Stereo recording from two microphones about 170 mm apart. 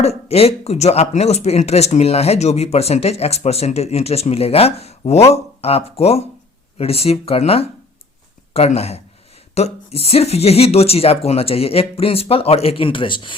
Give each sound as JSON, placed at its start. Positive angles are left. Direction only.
{"t": 0.0, "sound": "speech", "side_deg": 35}